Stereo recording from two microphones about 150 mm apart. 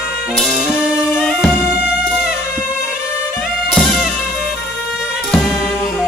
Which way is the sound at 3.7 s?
Centre (ahead or behind).